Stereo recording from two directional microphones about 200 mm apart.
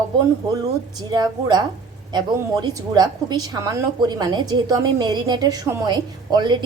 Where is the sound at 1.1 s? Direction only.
20° right (ahead or behind).